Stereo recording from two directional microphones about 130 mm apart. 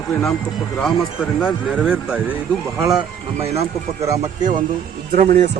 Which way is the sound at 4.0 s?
25° right (ahead or behind).